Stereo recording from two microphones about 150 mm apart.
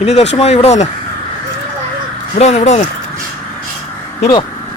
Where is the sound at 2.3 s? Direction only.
45° left (ahead or behind).